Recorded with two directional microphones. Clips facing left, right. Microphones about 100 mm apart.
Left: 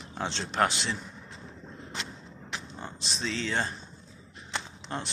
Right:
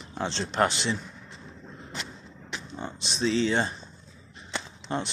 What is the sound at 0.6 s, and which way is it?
Speech, centre (ahead or behind).